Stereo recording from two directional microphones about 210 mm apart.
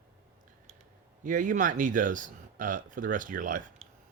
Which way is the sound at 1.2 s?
40° right (ahead or behind).